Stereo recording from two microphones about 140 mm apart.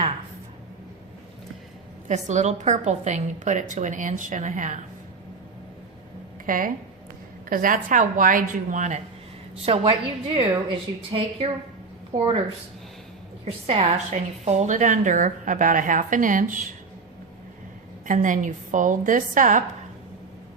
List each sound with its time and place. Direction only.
2.0 s a woman's voice: 60° right (ahead or behind)
6.4 s a woman's voice: 75° right (ahead or behind)
9.6 s a woman's voice: 45° right (ahead or behind)
13.4 s a woman's voice: 50° right (ahead or behind); by 16.7 s 70° right (ahead or behind)
18.0 s a woman's voice: 65° right (ahead or behind)